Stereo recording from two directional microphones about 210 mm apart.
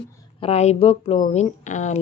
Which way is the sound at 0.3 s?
30° left (ahead or behind).